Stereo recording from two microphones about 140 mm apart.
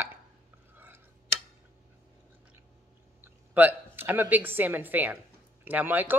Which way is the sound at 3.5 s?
15° right (ahead or behind).